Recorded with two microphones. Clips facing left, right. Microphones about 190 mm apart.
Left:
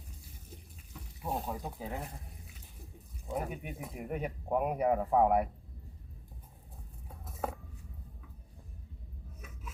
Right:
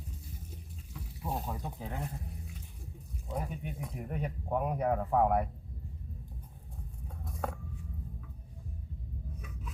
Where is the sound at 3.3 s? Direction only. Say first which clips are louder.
Left 1 dB; 5° left (ahead or behind).